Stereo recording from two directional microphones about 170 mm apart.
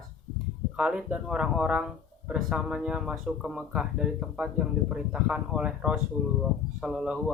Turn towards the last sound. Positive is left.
turn(degrees=-5)  # may be behind; listen again after turning